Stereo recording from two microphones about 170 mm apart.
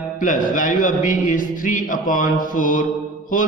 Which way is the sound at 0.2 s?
50° left (ahead or behind).